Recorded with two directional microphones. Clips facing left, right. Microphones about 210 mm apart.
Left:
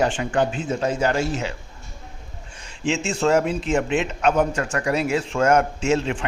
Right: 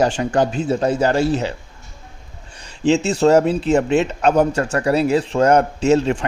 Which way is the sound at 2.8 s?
35° right (ahead or behind).